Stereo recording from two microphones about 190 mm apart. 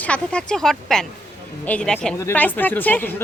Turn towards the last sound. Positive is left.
turn(degrees=10)  # may be behind; listen again after turning